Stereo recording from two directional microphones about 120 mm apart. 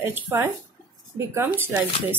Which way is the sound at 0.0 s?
20° right (ahead or behind).